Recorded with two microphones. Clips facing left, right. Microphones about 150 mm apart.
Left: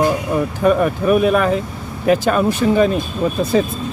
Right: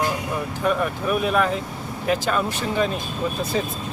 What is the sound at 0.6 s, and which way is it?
Speech, 55° left (ahead or behind).